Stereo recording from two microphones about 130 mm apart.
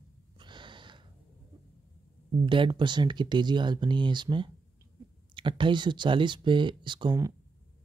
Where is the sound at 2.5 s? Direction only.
40° right (ahead or behind).